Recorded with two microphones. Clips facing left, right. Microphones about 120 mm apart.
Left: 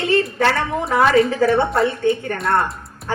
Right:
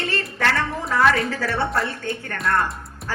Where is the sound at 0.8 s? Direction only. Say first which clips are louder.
Left 5 dB; 25° left (ahead or behind).